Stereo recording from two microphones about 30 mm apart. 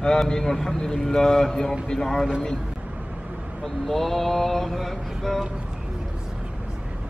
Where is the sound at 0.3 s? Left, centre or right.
Centre.